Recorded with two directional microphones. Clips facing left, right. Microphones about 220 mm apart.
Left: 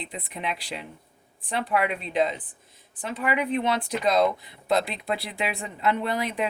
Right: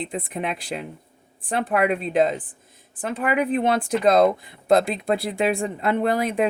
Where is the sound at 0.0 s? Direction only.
50° right (ahead or behind).